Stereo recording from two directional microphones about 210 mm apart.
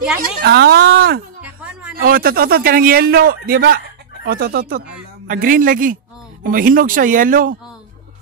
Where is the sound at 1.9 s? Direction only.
45° right (ahead or behind).